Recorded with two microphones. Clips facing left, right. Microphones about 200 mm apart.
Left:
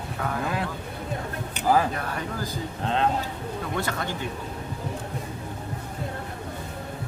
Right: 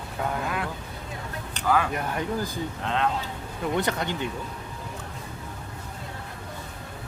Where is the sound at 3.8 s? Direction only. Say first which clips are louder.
Right 2 dB; 20° right (ahead or behind).